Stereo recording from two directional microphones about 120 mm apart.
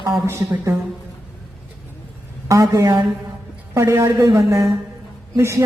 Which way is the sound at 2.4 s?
30° right (ahead or behind).